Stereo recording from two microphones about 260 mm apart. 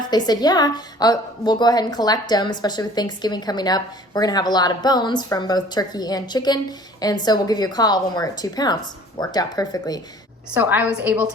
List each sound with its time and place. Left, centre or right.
0.1 s a woman's voice: centre
10.5 s a woman's voice: centre